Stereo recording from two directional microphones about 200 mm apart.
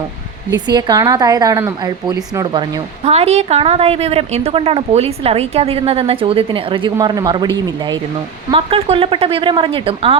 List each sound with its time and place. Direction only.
0.5 s a woman's voice: 20° right (ahead or behind)